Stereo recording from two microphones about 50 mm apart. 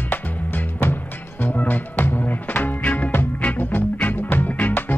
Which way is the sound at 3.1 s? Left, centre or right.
Left.